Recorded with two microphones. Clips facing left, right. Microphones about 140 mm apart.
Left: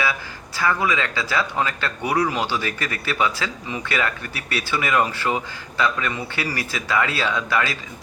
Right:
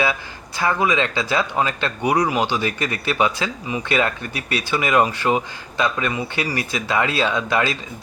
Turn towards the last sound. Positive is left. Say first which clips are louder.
# right 2 dB
turn(degrees=-25)  # may be behind; listen again after turning